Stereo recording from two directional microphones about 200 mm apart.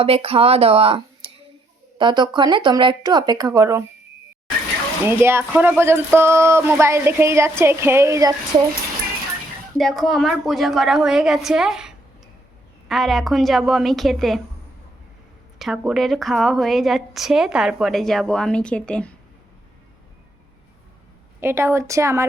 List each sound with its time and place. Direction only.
0.0 s speech: 30° right (ahead or behind)
5.0 s speech: 10° right (ahead or behind)
9.7 s a woman's voice: centre (ahead or behind)
15.5 s a woman's voice: centre (ahead or behind)
21.4 s speech: 10° right (ahead or behind)